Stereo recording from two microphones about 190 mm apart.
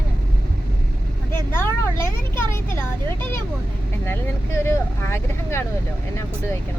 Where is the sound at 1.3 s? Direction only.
10° left (ahead or behind).